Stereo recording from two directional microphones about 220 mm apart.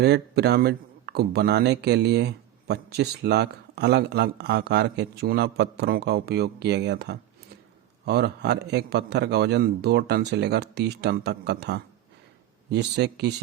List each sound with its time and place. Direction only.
0.0 s speech: 50° right (ahead or behind)